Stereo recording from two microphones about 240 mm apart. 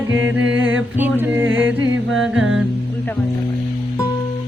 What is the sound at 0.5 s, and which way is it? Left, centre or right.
Music, right.